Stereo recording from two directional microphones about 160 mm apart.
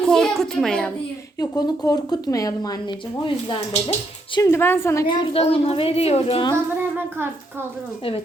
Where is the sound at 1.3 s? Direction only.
25° left (ahead or behind).